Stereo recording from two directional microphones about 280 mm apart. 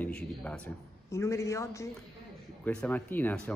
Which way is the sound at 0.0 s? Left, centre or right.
Centre.